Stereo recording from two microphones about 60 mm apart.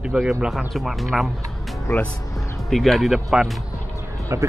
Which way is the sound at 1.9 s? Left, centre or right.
Left.